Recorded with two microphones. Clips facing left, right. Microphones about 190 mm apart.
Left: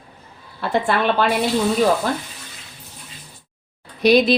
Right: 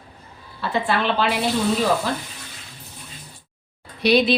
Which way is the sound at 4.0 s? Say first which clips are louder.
Left 3 dB; 45° left (ahead or behind).